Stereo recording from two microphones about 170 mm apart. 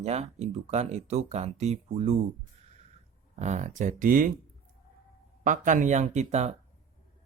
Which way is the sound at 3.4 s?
45° right (ahead or behind).